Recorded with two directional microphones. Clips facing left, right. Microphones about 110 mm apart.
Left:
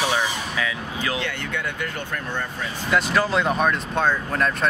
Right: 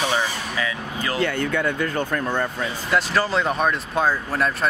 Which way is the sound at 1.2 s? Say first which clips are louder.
Right 6 dB; 40° right (ahead or behind).